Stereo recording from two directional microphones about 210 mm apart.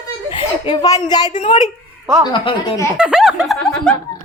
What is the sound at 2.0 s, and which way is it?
Speech, 15° right (ahead or behind).